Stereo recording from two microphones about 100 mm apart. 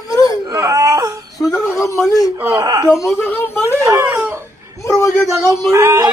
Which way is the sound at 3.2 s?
20° left (ahead or behind).